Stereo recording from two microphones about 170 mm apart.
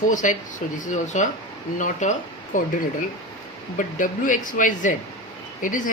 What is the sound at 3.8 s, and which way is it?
Speech, 50° left (ahead or behind).